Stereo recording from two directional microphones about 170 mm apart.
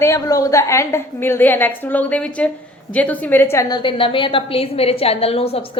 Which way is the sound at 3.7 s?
30° left (ahead or behind).